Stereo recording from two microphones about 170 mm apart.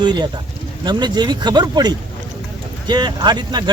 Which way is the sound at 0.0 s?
25° right (ahead or behind).